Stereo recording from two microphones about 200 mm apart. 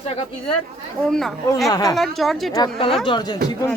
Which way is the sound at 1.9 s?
Centre (ahead or behind).